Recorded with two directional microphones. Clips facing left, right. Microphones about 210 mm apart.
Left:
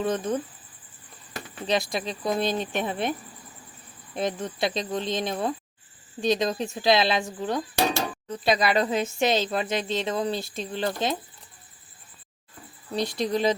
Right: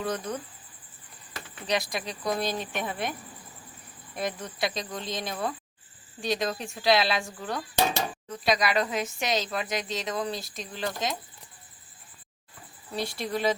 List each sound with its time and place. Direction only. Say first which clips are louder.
0.0 s speech: left 5 dB; 25° left (ahead or behind)
1.6 s speech: left 3 dB; 25° left (ahead or behind)
13.0 s speech: left 5 dB; 20° left (ahead or behind)